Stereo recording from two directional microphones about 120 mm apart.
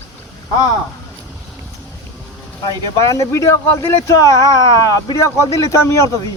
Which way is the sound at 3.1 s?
25° left (ahead or behind).